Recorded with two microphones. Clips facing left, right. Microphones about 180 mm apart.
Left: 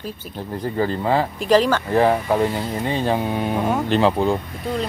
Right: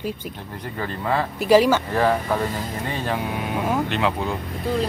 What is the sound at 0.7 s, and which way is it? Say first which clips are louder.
Speech: left 4 dB; 30° left (ahead or behind).